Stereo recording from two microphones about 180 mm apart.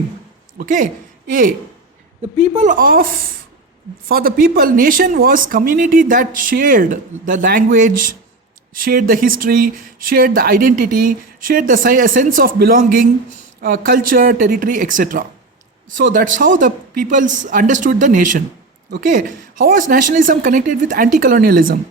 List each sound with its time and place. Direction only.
0.6 s speech: 45° right (ahead or behind)
2.6 s speech: 50° right (ahead or behind)